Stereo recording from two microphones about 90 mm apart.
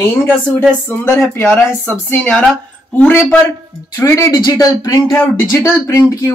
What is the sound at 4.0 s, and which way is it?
Speech, 35° left (ahead or behind).